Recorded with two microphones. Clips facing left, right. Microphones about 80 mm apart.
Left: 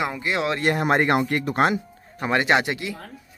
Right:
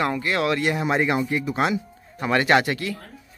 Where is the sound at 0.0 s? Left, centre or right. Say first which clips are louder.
Right 2 dB; centre.